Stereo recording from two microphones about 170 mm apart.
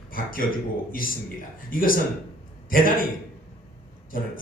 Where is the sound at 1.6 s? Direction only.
55° left (ahead or behind).